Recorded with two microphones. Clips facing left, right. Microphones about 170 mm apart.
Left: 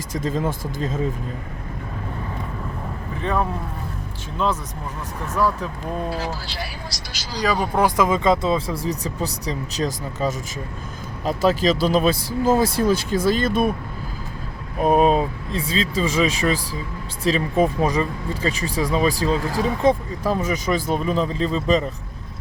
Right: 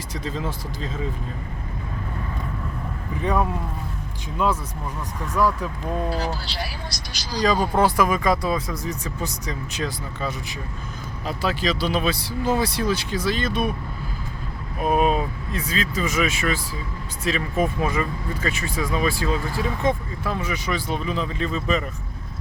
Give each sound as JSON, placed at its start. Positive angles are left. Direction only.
{"t": 0.1, "sound": "speech", "side_deg": 45}
{"t": 7.3, "sound": "speech", "side_deg": 10}
{"t": 14.8, "sound": "speech", "side_deg": 35}